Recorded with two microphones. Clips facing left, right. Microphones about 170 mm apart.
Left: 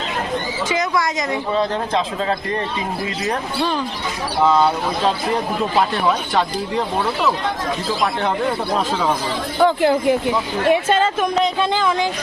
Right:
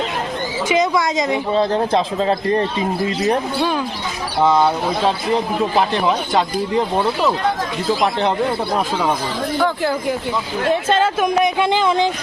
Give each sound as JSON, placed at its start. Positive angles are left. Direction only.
{"t": 0.7, "sound": "a woman's voice", "side_deg": -20}
{"t": 1.5, "sound": "a man's voice", "side_deg": -30}
{"t": 4.4, "sound": "speech", "side_deg": -15}
{"t": 5.7, "sound": "speech", "side_deg": -15}
{"t": 9.6, "sound": "speech", "side_deg": 20}
{"t": 11.0, "sound": "speech", "side_deg": -10}